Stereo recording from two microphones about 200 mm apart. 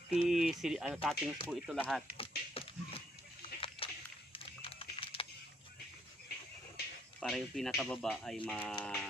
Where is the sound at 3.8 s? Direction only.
30° left (ahead or behind).